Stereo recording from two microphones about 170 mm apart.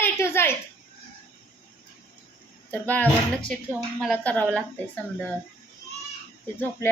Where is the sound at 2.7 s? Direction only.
10° left (ahead or behind).